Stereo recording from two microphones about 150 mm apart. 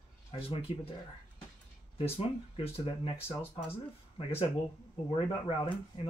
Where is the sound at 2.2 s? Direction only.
40° left (ahead or behind).